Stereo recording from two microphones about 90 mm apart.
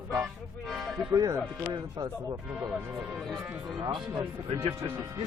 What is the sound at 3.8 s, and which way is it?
Speech, 60° right (ahead or behind).